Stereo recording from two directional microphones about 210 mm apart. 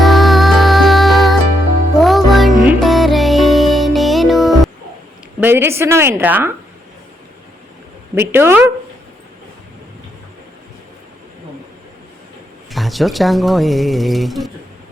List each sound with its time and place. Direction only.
0.0 s music: centre (ahead or behind)
5.4 s a woman's voice: 10° right (ahead or behind)
8.1 s a woman's voice: 10° right (ahead or behind)
12.7 s speech: centre (ahead or behind)